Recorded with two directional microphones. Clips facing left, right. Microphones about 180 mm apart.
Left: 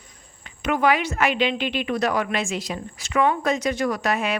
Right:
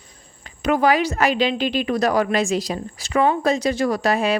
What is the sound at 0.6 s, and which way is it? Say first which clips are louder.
A woman's voice: right 3 dB; 35° right (ahead or behind).